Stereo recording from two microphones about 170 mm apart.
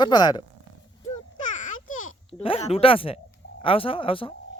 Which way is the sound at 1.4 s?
45° left (ahead or behind).